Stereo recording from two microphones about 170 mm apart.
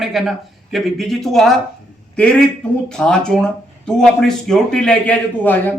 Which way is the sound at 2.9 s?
5° left (ahead or behind).